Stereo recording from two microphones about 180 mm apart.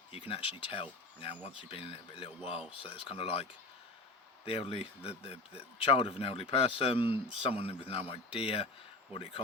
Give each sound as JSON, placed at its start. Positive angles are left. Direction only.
{"t": 0.1, "sound": "speech", "side_deg": 30}
{"t": 4.4, "sound": "speech", "side_deg": 30}